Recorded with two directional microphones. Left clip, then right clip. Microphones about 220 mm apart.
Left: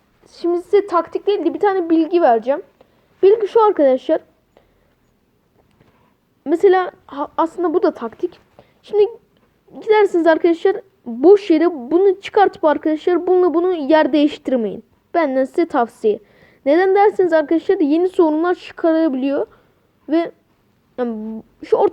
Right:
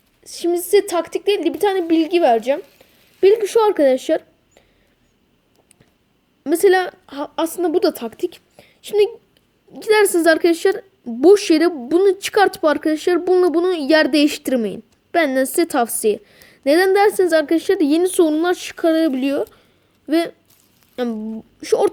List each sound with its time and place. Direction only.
0.3 s a woman's voice: 30° right (ahead or behind)
6.4 s a woman's voice: 30° right (ahead or behind)
11.7 s a woman's voice: 25° right (ahead or behind)
11.9 s speech: 35° right (ahead or behind)